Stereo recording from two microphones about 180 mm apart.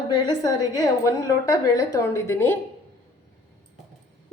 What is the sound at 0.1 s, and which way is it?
Speech, 25° left (ahead or behind).